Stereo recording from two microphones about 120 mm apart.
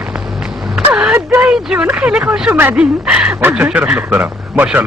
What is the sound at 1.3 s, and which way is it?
Speech, 10° right (ahead or behind).